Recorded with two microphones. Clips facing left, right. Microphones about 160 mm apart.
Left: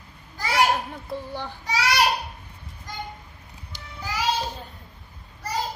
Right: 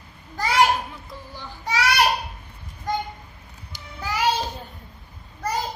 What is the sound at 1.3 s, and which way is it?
Child singing, 60° left (ahead or behind).